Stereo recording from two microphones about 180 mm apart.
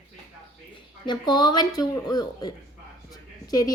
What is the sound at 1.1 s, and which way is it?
Speech, 25° left (ahead or behind).